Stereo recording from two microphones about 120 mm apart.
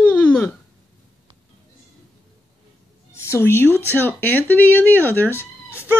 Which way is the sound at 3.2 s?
20° left (ahead or behind).